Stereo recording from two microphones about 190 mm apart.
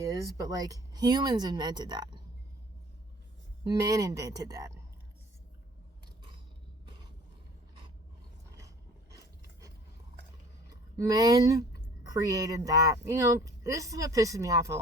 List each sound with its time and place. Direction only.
0.0 s speech: 20° right (ahead or behind)
3.8 s speech: 15° right (ahead or behind)
9.0 s a sound: 20° right (ahead or behind)
10.7 s speech: 20° right (ahead or behind)